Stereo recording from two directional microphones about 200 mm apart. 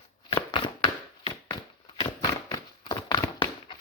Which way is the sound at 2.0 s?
20° left (ahead or behind).